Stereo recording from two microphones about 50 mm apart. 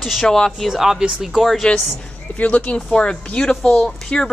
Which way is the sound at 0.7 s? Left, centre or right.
Centre.